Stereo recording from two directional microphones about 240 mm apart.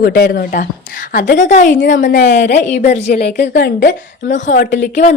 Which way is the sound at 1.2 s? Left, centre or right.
Left.